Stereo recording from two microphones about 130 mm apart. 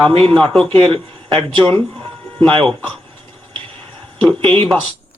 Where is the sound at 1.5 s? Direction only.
15° left (ahead or behind).